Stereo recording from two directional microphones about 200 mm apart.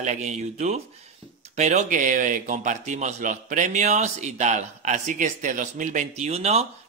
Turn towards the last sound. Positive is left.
turn(degrees=-30)  # may be behind; listen again after turning